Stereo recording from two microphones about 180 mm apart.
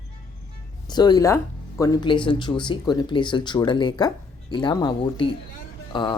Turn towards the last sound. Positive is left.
turn(degrees=25)  # may be behind; listen again after turning